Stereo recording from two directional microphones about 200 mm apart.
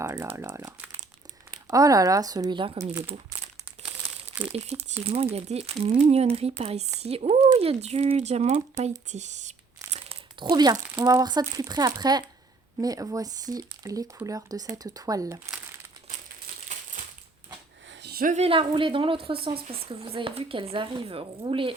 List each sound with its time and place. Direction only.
0.0 s speech: 15° right (ahead or behind)
4.5 s speech: 30° right (ahead or behind)
10.4 s speech: 20° right (ahead or behind)
18.0 s speech: 50° right (ahead or behind); by 21.7 s 25° right (ahead or behind)